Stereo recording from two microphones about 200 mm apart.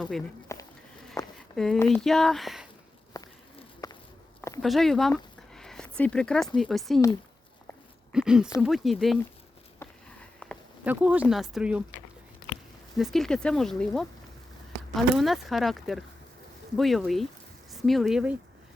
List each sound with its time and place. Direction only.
0.5 s a sound: 15° left (ahead or behind)
1.5 s speech: 5° left (ahead or behind)
3.1 s a sound: 15° left (ahead or behind)
3.8 s walk: 15° left (ahead or behind)
4.6 s speech: centre (ahead or behind)
8.1 s speech: 5° right (ahead or behind)
10.4 s a sound: 10° left (ahead or behind)
10.8 s speech: 5° right (ahead or behind)
13.0 s speech: centre (ahead or behind)